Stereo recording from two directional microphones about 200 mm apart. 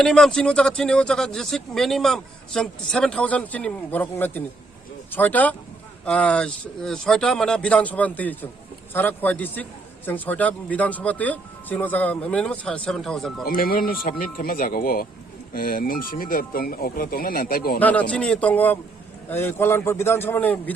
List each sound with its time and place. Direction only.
0.0 s speech: 5° left (ahead or behind)
13.4 s speech: 45° left (ahead or behind)
17.7 s speech: 5° left (ahead or behind)